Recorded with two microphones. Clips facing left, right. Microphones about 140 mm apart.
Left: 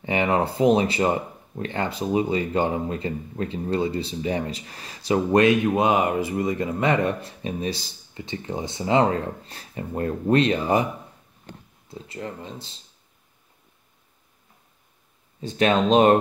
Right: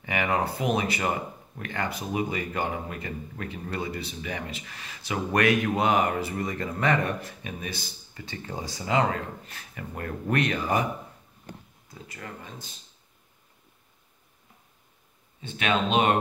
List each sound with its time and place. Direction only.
0.0 s speech: 30° left (ahead or behind)
11.9 s speech: 25° left (ahead or behind)
15.4 s speech: 35° left (ahead or behind)